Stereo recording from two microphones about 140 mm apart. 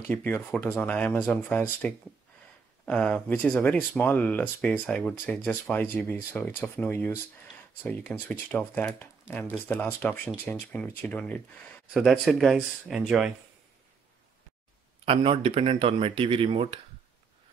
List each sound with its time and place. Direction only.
0.1 s speech: 15° left (ahead or behind)
11.9 s speech: centre (ahead or behind)
15.0 s speech: 45° right (ahead or behind)